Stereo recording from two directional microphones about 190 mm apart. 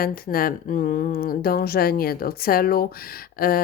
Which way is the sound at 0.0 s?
50° left (ahead or behind).